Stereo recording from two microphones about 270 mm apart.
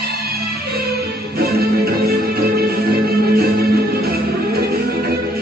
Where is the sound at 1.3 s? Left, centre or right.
Right.